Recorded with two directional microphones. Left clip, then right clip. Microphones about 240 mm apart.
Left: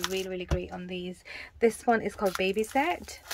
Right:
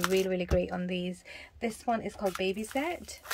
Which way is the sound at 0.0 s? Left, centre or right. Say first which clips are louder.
Right 4 dB; centre.